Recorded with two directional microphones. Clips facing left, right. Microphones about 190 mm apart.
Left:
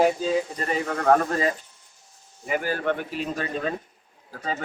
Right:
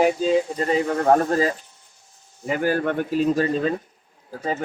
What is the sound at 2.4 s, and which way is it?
A man's voice, 45° right (ahead or behind).